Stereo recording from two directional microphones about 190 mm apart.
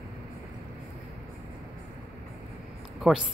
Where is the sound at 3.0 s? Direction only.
5° right (ahead or behind).